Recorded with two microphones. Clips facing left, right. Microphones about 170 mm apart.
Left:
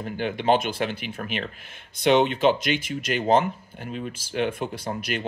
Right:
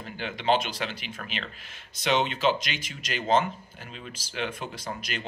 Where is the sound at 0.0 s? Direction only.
50° left (ahead or behind).